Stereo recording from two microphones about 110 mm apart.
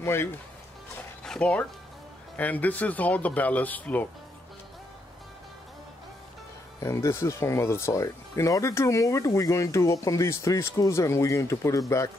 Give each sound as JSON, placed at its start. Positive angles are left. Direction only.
{"t": 0.0, "sound": "speech", "side_deg": 25}
{"t": 1.2, "sound": "speech", "side_deg": 5}
{"t": 6.8, "sound": "speech", "side_deg": 25}